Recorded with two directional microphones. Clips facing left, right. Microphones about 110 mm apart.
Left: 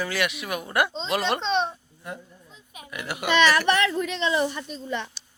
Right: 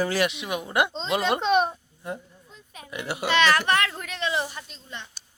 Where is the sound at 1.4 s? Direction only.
10° right (ahead or behind).